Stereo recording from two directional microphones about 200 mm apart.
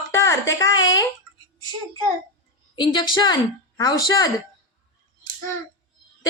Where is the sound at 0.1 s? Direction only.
15° left (ahead or behind).